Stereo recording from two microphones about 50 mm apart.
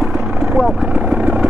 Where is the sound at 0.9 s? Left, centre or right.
Right.